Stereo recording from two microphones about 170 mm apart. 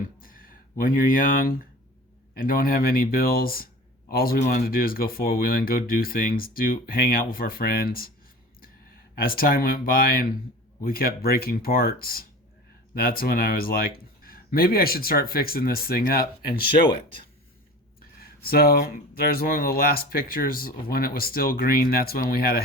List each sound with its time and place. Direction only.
0.2 s a sound: 55° left (ahead or behind)
2.3 s speech: 55° left (ahead or behind)
9.1 s speech: 60° left (ahead or behind)
18.2 s speech: 65° left (ahead or behind)